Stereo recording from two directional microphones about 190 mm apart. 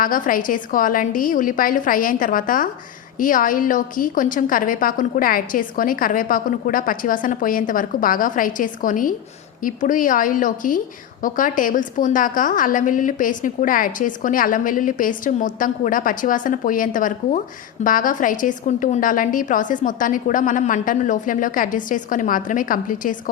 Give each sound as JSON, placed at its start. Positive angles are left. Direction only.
{"t": 0.0, "sound": "a woman's voice", "side_deg": 45}